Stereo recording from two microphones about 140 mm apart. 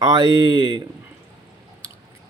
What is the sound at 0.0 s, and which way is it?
Speech, 25° right (ahead or behind).